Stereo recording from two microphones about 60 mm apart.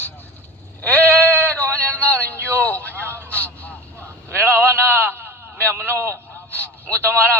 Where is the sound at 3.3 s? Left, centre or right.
Left.